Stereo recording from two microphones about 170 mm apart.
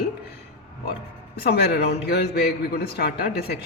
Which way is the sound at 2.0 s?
70° left (ahead or behind).